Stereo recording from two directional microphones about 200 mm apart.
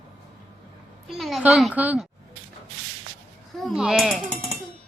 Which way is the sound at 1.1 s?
Centre (ahead or behind).